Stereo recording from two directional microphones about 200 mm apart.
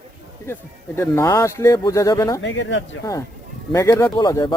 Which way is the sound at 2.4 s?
65° left (ahead or behind).